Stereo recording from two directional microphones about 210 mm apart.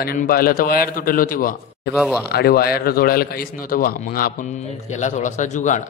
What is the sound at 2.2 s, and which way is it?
A man's voice, 50° left (ahead or behind).